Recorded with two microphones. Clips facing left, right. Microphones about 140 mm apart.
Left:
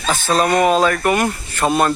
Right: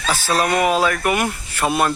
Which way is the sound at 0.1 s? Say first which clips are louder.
Left 3 dB; 15° left (ahead or behind).